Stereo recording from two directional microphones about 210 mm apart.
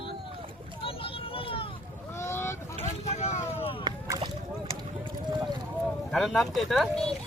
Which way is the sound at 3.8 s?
20° right (ahead or behind).